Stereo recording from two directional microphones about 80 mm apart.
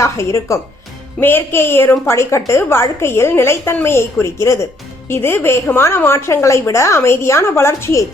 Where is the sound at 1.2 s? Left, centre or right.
Left.